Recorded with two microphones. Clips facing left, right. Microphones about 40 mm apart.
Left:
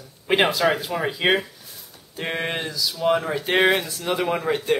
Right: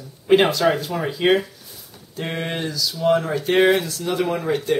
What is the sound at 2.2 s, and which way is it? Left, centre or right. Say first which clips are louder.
Speech: even; centre.